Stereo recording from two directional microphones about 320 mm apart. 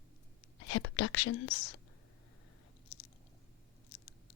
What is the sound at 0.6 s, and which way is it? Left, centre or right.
Speech, left.